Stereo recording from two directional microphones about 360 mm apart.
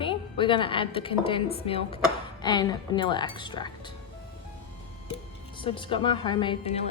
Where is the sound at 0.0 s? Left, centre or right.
Centre.